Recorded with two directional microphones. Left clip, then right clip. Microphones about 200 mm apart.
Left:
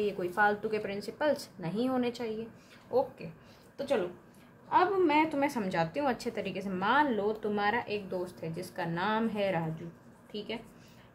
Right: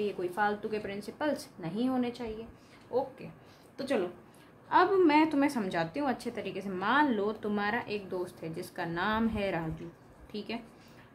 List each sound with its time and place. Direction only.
0.0 s a woman's voice: 10° left (ahead or behind)
2.9 s speech: 25° left (ahead or behind)
4.6 s a woman's voice: 15° right (ahead or behind)